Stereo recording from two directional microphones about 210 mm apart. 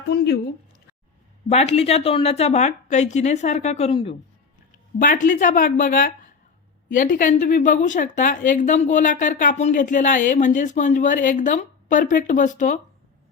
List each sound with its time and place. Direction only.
0.1 s speech: 50° left (ahead or behind)
1.5 s a woman's voice: 30° left (ahead or behind)
4.9 s a woman's voice: 40° left (ahead or behind)